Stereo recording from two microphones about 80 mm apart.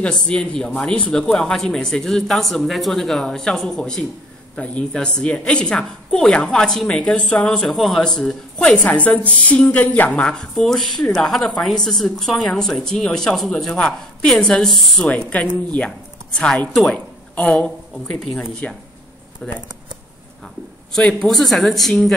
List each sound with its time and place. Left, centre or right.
0.0 s a woman's voice: centre
15.0 s a woman's voice: centre
17.9 s a woman's voice: centre
20.9 s speech: centre